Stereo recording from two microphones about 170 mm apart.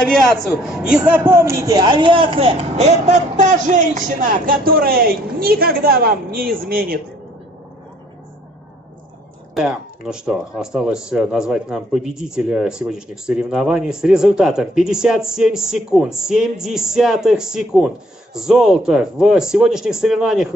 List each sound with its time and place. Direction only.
0.1 s a man's voice: 5° left (ahead or behind); by 7.0 s 60° right (ahead or behind)
9.5 s speech: 5° right (ahead or behind)